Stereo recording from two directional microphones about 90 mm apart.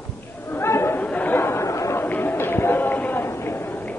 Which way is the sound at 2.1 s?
20° left (ahead or behind).